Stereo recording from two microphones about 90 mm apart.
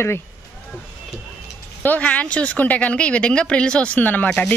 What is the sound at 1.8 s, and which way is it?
Speech, 15° left (ahead or behind).